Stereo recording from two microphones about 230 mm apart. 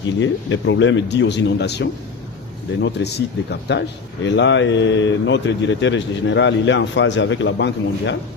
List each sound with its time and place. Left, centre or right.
0.0 s speech: left